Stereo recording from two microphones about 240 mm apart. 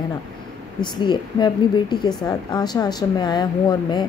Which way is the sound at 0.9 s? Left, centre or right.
Centre.